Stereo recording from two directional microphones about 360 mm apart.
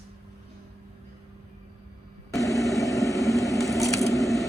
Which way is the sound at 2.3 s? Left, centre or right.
Centre.